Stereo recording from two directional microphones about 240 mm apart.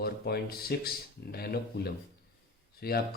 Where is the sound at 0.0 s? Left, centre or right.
Left.